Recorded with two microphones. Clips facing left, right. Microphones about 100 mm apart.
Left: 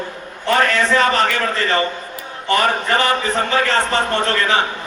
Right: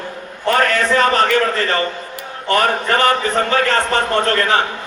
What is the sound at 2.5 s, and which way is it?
A man's voice, 50° right (ahead or behind).